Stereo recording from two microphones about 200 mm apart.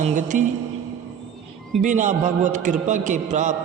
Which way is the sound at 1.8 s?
40° right (ahead or behind).